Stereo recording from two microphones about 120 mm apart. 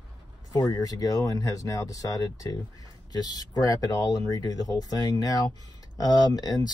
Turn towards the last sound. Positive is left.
turn(degrees=35)  # may be behind; listen again after turning